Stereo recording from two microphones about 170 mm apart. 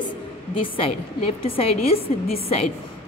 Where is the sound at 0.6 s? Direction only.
30° left (ahead or behind).